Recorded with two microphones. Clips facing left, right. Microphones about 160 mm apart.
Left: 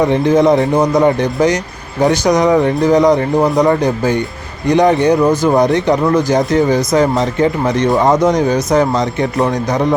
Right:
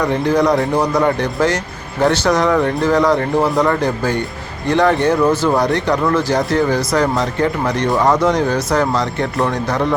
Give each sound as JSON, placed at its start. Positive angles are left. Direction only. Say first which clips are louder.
{"t": 0.0, "sound": "speech", "louder": "left 4 dB", "side_deg": 20}